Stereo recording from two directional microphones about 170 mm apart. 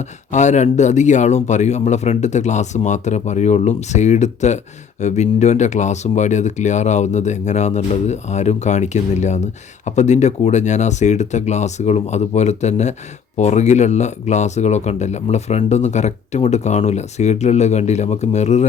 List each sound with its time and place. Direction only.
0.3 s speech: 45° left (ahead or behind)